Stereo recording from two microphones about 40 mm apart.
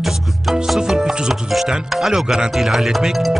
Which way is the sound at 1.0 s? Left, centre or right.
Centre.